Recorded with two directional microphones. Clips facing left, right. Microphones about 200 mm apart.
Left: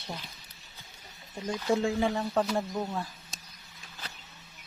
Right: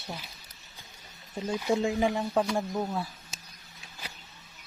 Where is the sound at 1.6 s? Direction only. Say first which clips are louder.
Even; 15° right (ahead or behind).